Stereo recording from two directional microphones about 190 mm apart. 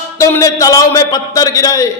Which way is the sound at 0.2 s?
15° left (ahead or behind).